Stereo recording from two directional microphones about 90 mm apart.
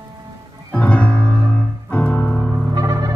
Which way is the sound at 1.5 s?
15° left (ahead or behind).